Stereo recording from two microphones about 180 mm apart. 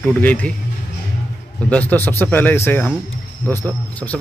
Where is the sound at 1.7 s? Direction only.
10° left (ahead or behind).